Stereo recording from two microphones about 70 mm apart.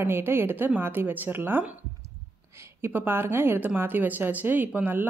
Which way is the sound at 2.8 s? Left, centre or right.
Right.